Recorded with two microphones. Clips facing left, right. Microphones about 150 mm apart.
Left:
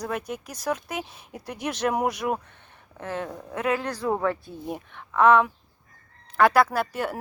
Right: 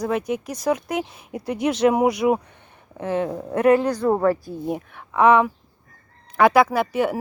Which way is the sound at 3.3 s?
30° right (ahead or behind).